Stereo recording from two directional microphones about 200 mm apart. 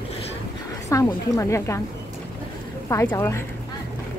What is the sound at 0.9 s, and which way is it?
Speech, 15° left (ahead or behind).